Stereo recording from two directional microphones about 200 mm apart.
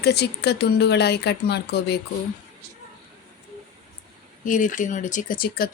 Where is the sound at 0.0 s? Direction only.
55° left (ahead or behind).